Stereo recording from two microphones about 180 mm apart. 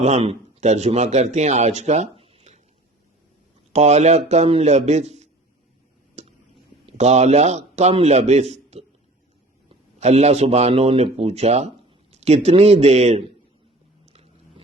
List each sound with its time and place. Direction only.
0.0 s a man's voice: 40° right (ahead or behind)
3.7 s a man's voice: 40° right (ahead or behind)
6.8 s a man's voice: 35° right (ahead or behind)